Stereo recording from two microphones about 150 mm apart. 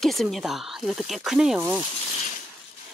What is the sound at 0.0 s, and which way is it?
Speech, centre (ahead or behind).